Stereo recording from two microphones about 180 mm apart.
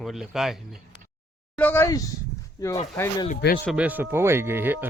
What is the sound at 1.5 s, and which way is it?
Speech, 10° left (ahead or behind).